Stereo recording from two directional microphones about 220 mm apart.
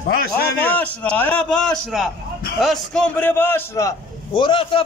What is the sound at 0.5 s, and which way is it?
A man's voice, 10° left (ahead or behind).